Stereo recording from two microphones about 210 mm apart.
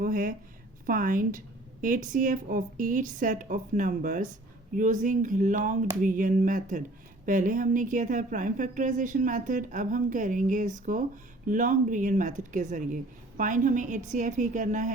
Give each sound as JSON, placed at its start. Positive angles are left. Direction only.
{"t": 0.0, "sound": "a woman's voice", "side_deg": -40}